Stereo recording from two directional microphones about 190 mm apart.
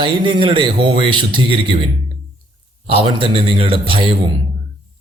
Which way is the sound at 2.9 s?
30° right (ahead or behind).